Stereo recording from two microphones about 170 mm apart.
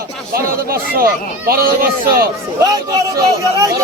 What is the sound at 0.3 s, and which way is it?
Speech, 60° right (ahead or behind).